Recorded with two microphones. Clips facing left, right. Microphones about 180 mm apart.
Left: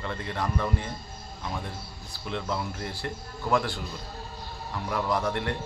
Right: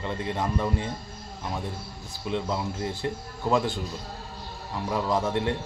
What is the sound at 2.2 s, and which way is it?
Speech, 15° right (ahead or behind).